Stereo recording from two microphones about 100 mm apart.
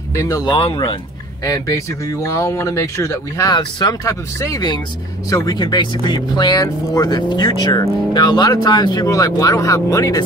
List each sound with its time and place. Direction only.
0.1 s speech: 35° left (ahead or behind)
0.5 s speech: 55° left (ahead or behind)
1.4 s speech: 35° left (ahead or behind)
3.5 s speech: 45° left (ahead or behind)
4.1 s speech: 35° left (ahead or behind)
9.0 s speech: 35° left (ahead or behind)